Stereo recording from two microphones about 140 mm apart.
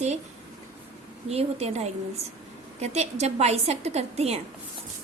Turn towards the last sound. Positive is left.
turn(degrees=-50)  # may be behind; listen again after turning